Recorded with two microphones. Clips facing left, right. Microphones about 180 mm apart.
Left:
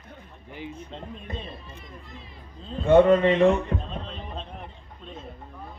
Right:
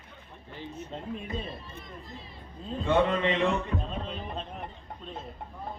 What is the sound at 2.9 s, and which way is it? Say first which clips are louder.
Speech: left 9 dB; 45° left (ahead or behind).